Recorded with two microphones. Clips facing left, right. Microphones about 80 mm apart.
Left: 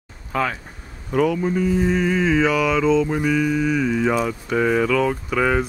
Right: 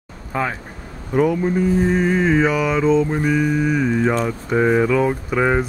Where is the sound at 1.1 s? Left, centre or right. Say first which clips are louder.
Right 2 dB; right.